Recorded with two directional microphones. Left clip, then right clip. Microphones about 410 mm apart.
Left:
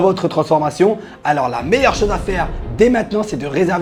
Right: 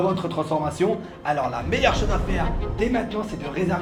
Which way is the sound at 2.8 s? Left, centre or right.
Left.